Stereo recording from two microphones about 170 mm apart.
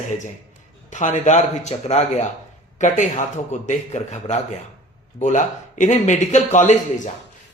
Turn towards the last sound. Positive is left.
turn(degrees=45)  # may be behind; listen again after turning